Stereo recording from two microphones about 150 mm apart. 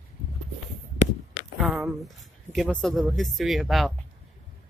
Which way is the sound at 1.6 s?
Centre (ahead or behind).